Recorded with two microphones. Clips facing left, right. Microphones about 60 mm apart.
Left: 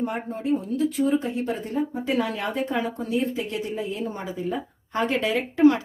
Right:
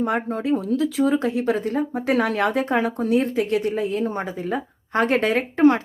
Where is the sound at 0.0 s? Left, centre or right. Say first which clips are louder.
Right 5 dB; right.